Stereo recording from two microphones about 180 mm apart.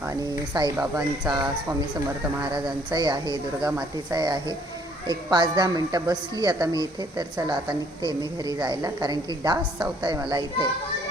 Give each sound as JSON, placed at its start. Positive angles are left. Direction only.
{"t": 0.1, "sound": "speech", "side_deg": -20}
{"t": 2.6, "sound": "speech", "side_deg": -25}
{"t": 3.7, "sound": "speech", "side_deg": -10}
{"t": 4.2, "sound": "speech", "side_deg": -20}